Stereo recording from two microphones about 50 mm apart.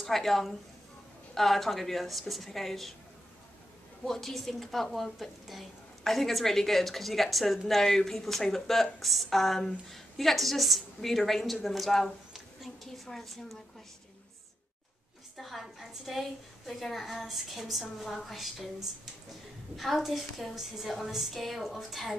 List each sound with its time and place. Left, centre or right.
0.0 s a woman's voice: centre
4.0 s a woman's voice: centre
15.4 s a woman's voice: centre